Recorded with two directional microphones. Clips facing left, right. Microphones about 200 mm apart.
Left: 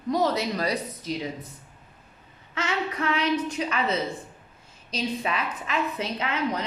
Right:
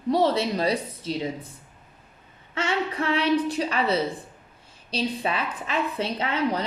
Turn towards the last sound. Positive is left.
turn(degrees=-35)  # may be behind; listen again after turning